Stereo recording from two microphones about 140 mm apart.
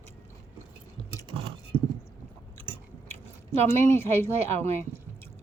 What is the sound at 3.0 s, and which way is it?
Speech, 20° left (ahead or behind).